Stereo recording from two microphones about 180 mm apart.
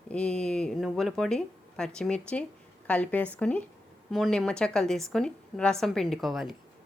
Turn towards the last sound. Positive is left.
turn(degrees=0)  # may be behind; listen again after turning